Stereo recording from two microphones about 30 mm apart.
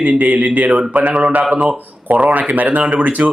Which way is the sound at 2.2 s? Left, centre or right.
Right.